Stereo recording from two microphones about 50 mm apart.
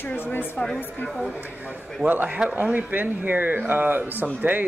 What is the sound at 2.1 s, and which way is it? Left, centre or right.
Speech, right.